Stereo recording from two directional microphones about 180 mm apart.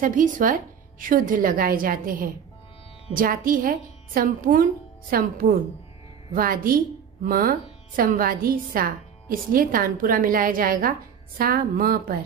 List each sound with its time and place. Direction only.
0.0 s a woman's voice: 45° right (ahead or behind)